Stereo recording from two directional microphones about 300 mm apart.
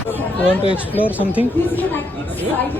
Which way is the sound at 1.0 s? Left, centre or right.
Centre.